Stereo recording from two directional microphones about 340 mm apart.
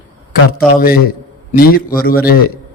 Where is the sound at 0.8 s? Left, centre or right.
Left.